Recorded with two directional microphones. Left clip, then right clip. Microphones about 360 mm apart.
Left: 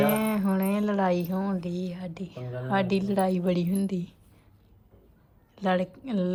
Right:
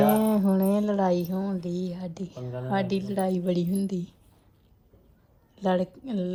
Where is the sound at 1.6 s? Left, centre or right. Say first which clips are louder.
Right 2 dB; centre.